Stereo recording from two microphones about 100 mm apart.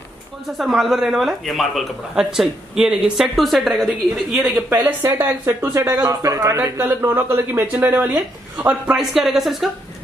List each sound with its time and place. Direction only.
0.6 s speech: centre (ahead or behind)
4.6 s a man's voice: 20° right (ahead or behind); by 6.6 s 35° right (ahead or behind)
6.6 s speech: 25° right (ahead or behind)
8.9 s speech: 5° right (ahead or behind)